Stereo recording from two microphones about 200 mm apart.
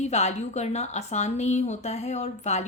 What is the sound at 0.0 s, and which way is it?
A woman's voice, 35° left (ahead or behind).